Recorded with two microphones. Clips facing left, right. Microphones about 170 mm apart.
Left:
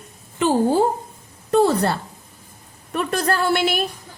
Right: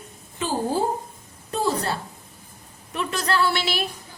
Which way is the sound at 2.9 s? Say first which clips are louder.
Left 3 dB; 50° left (ahead or behind).